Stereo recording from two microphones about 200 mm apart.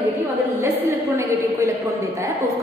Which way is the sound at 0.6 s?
15° right (ahead or behind).